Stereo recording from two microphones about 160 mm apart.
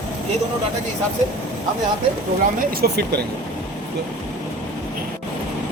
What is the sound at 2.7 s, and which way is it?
Speech, 80° right.